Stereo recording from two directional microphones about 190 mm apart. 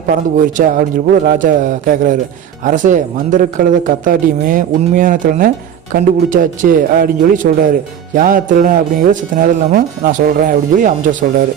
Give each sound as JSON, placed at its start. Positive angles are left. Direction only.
{"t": 0.1, "sound": "speech", "side_deg": -45}